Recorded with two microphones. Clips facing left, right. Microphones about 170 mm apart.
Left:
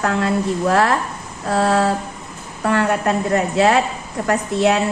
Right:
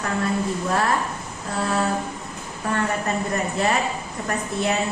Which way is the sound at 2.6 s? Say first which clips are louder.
Left 7 dB; 75° left (ahead or behind).